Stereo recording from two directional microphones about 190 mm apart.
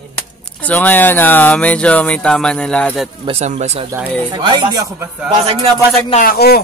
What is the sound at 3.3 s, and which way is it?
Speech, 35° right (ahead or behind).